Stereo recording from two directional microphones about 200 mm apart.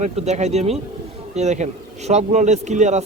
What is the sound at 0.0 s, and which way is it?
A man's voice, 35° right (ahead or behind).